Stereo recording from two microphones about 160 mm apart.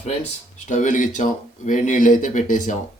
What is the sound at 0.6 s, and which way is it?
Speech, 50° left (ahead or behind).